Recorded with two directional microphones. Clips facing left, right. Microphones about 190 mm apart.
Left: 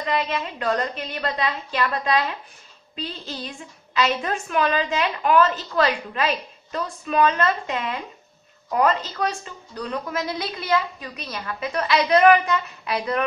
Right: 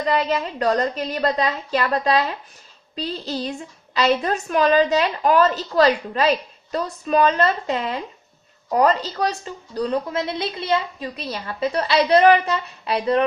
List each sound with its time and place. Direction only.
0.1 s a woman's voice: 40° right (ahead or behind)